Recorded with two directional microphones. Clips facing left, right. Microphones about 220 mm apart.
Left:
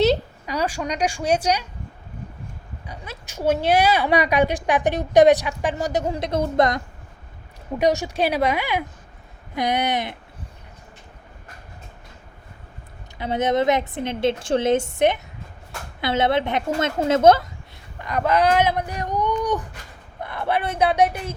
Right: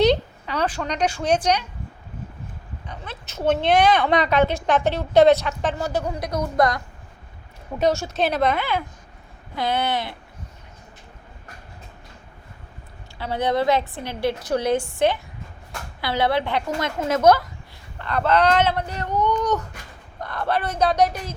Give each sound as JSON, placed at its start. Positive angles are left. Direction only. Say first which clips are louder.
{"t": 0.0, "sound": "a woman's voice", "louder": "right 1 dB", "side_deg": 10}
{"t": 2.8, "sound": "a woman's voice", "louder": "even", "side_deg": 10}
{"t": 13.1, "sound": "a woman's voice", "louder": "left 2 dB", "side_deg": 20}
{"t": 18.0, "sound": "a woman's voice", "louder": "even", "side_deg": 15}